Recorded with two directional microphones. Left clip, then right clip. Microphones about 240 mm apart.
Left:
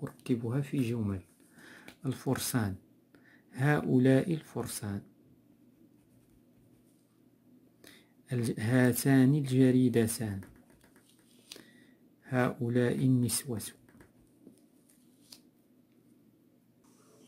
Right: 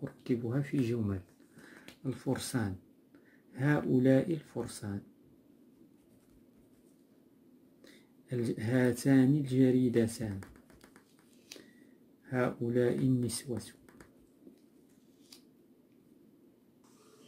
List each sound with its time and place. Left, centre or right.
0.0 s speech: left
1.8 s speech: left
7.8 s speech: left
12.3 s speech: left